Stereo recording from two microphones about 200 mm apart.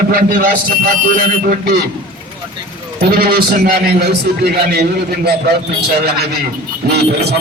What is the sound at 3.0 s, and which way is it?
A man's voice, 50° right (ahead or behind).